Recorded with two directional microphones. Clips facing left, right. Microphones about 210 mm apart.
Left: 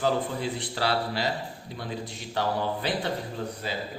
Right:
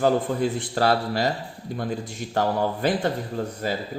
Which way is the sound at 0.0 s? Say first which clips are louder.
Right 6 dB; 50° right (ahead or behind).